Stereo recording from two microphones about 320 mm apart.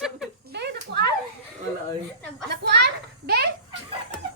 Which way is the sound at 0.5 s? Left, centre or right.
Right.